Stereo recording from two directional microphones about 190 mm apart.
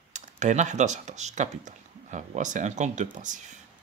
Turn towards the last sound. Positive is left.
turn(degrees=-40)  # may be behind; listen again after turning